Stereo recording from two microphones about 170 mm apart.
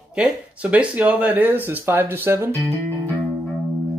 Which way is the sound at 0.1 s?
10° right (ahead or behind).